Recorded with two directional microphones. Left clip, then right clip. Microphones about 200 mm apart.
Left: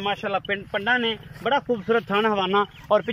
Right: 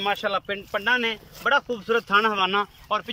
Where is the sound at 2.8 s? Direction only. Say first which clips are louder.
Left 6 dB; 35° left (ahead or behind).